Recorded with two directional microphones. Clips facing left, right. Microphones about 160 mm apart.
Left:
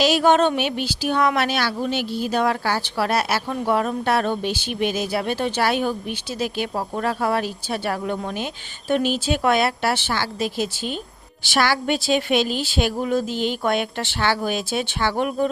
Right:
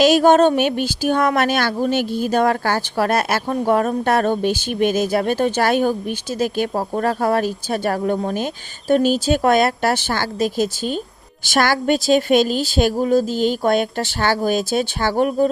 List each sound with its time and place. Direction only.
0.0 s speech: 45° right (ahead or behind)